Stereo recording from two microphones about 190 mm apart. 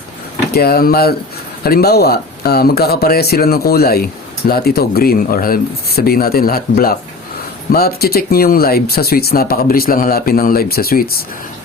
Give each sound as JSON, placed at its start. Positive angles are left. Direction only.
{"t": 0.5, "sound": "speech", "side_deg": 55}